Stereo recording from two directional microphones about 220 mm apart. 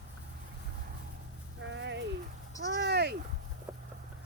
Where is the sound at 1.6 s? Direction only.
55° right (ahead or behind).